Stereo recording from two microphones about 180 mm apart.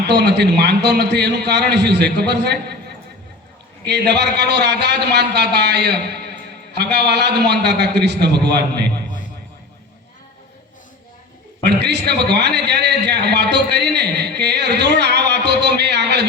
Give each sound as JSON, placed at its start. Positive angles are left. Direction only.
{"t": 0.1, "sound": "a man's voice", "side_deg": -70}
{"t": 3.8, "sound": "a man's voice", "side_deg": -70}
{"t": 11.6, "sound": "a man's voice", "side_deg": -70}